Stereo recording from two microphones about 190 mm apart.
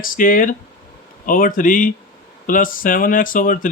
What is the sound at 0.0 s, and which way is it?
Speech, 45° left (ahead or behind).